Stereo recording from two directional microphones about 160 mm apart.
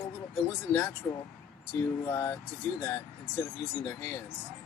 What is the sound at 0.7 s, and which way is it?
Speech, 15° left (ahead or behind).